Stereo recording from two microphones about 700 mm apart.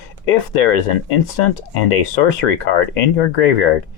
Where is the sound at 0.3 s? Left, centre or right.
Left.